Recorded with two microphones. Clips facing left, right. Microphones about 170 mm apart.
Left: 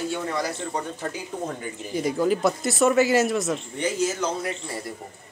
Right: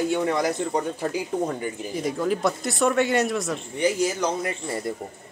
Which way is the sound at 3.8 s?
10° right (ahead or behind).